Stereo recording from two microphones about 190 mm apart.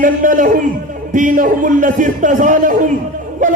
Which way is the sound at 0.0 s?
45° right (ahead or behind).